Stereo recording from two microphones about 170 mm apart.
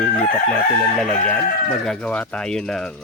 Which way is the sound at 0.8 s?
5° left (ahead or behind).